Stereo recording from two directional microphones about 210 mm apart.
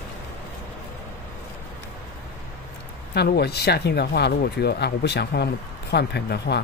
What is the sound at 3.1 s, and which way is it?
Speech, 50° left (ahead or behind).